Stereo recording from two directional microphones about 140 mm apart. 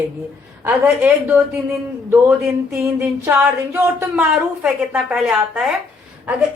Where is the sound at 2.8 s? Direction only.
20° right (ahead or behind).